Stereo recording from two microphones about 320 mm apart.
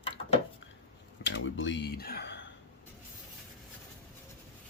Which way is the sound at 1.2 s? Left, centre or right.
Left.